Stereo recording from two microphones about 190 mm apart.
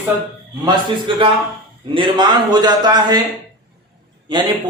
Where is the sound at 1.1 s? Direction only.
25° right (ahead or behind).